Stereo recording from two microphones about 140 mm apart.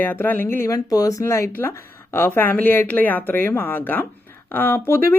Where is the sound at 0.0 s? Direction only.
15° left (ahead or behind).